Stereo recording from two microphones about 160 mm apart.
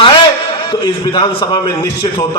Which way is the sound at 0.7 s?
30° left (ahead or behind).